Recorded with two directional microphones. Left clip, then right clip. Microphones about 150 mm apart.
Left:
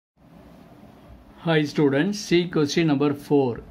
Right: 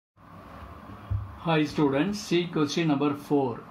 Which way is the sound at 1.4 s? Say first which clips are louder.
Left 4 dB; 45° left (ahead or behind).